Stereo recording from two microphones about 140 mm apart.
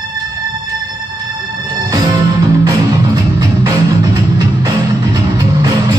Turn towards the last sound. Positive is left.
turn(degrees=-25)  # may be behind; listen again after turning